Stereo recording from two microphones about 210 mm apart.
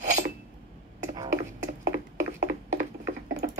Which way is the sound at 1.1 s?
20° right (ahead or behind).